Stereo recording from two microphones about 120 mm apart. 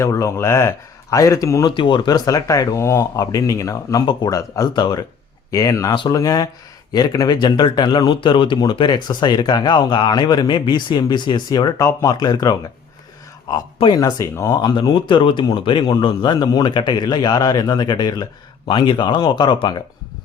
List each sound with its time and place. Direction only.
0.0 s speech: 25° left (ahead or behind)
1.7 s speech: 40° left (ahead or behind)
5.9 s speech: 40° left (ahead or behind)
6.1 s speech: 30° left (ahead or behind)
11.8 s speech: 25° left (ahead or behind)
13.7 s speech: 45° left (ahead or behind)
14.0 s speech: 25° left (ahead or behind)